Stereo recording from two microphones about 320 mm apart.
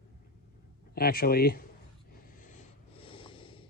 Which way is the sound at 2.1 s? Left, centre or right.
Left.